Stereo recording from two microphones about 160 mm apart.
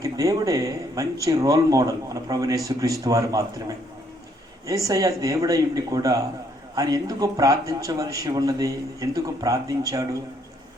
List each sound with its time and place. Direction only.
0.0 s speech: 20° right (ahead or behind)